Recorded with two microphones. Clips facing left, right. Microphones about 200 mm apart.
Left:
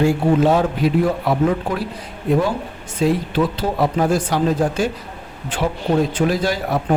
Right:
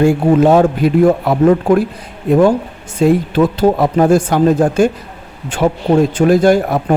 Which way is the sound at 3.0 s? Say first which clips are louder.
Right 6 dB; 50° right (ahead or behind).